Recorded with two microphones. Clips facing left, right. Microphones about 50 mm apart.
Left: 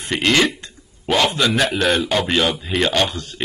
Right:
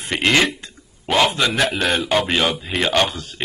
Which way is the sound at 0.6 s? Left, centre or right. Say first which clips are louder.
Even; centre.